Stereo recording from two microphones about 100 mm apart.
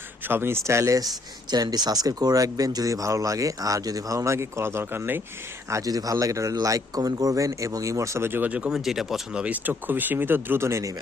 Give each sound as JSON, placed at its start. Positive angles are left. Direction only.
{"t": 0.3, "sound": "speech", "side_deg": -25}
{"t": 5.7, "sound": "speech", "side_deg": -35}